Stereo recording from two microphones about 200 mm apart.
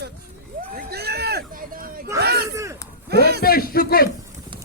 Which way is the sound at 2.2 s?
55° right (ahead or behind).